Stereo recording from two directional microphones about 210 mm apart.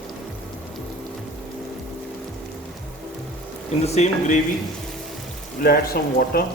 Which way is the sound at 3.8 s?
30° left (ahead or behind).